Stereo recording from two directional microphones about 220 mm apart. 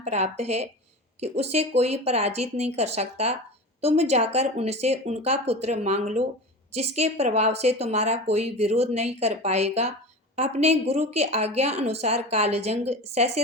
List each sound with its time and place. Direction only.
0.0 s speech: 30° right (ahead or behind)